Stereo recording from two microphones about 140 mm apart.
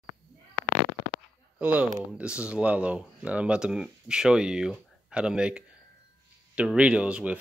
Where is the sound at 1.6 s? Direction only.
10° right (ahead or behind).